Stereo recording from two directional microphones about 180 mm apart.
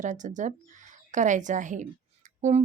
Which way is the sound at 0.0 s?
45° right (ahead or behind).